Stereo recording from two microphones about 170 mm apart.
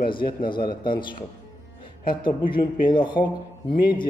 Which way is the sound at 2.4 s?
55° left (ahead or behind).